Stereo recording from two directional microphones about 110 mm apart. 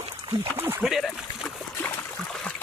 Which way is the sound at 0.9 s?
Centre (ahead or behind).